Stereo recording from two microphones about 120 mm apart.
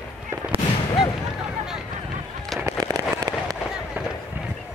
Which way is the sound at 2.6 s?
30° right (ahead or behind).